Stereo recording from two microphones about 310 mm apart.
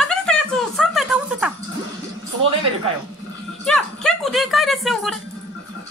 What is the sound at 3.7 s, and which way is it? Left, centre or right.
Music, centre.